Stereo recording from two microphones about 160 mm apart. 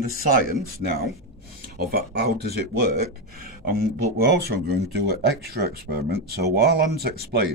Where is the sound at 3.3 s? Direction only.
65° right (ahead or behind).